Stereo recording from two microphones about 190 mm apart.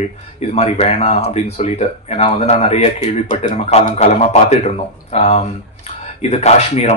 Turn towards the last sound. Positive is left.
turn(degrees=35)  # may be behind; listen again after turning